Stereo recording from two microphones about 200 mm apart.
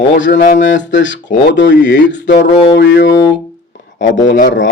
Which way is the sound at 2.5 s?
25° left (ahead or behind).